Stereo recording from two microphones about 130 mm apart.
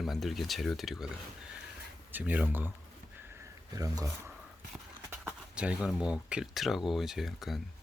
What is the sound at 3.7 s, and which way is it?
Speech, 25° right (ahead or behind).